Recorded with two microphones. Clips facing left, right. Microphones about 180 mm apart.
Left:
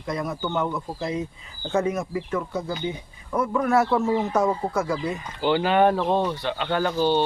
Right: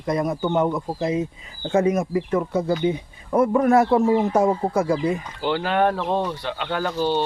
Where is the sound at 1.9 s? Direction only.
35° right (ahead or behind).